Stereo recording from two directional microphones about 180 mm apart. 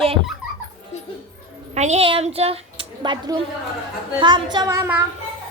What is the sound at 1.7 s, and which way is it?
A woman's voice, 40° right (ahead or behind).